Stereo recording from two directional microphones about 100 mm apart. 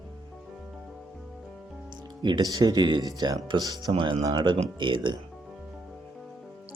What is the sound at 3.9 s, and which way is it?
Speech, 60° right (ahead or behind).